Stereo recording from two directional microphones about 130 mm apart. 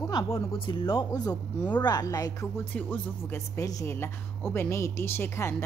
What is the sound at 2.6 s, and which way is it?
Speech, 15° left (ahead or behind).